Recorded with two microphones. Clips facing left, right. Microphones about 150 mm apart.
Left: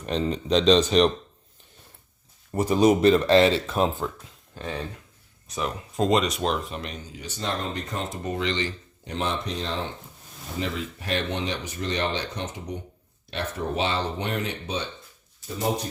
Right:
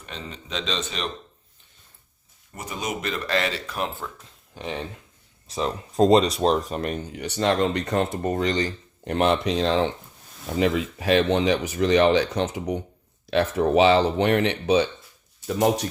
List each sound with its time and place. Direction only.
0.0 s a man's voice: 35° left (ahead or behind)
2.5 s speech: 35° left (ahead or behind)
4.5 s speech: 20° right (ahead or behind)
5.5 s speech: 30° right (ahead or behind)
9.0 s speech: 65° right (ahead or behind); by 14.8 s 90° right
15.6 s speech: 75° right (ahead or behind)